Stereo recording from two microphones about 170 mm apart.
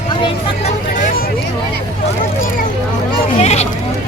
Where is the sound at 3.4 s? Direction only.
40° left (ahead or behind).